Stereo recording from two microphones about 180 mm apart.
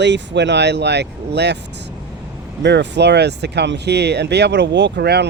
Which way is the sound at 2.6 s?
75° right (ahead or behind).